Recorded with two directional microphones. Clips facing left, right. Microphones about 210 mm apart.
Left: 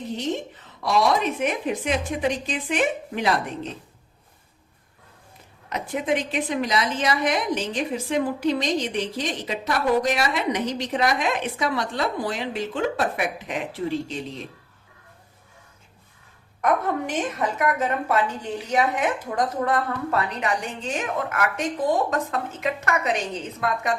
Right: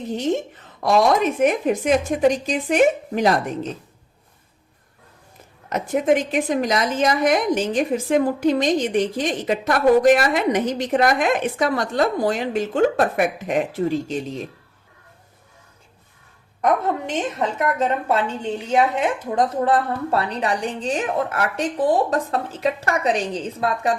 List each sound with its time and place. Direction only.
0.8 s a woman's voice: 50° right (ahead or behind)
5.6 s a woman's voice: 45° right (ahead or behind)
16.6 s a woman's voice: 25° right (ahead or behind)